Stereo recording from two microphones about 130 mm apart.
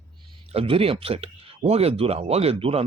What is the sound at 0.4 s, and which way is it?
Speech, 50° right (ahead or behind).